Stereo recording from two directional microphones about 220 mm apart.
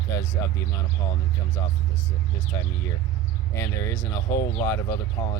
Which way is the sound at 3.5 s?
15° left (ahead or behind).